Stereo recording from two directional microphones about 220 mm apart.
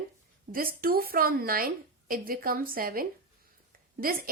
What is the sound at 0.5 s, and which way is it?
A woman's voice, 40° right (ahead or behind).